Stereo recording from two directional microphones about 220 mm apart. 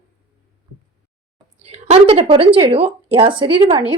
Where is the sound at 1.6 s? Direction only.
30° right (ahead or behind).